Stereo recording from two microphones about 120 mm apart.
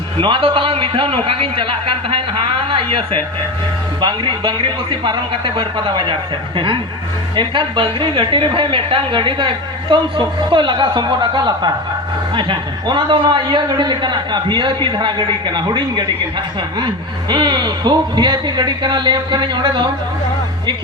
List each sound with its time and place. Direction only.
0.2 s a man's voice: 45° right (ahead or behind)
7.3 s a man's voice: 45° right (ahead or behind)